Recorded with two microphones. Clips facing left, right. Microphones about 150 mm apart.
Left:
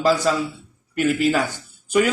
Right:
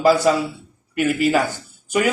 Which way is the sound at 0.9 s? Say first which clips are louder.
Even; 50° right (ahead or behind).